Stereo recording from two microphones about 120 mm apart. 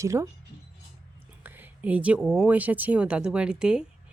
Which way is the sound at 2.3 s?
10° right (ahead or behind).